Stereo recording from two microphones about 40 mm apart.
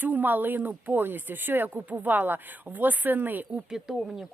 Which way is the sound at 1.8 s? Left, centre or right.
Right.